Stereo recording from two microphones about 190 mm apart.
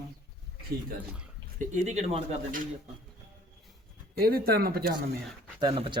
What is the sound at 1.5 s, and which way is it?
Speech, 40° right (ahead or behind).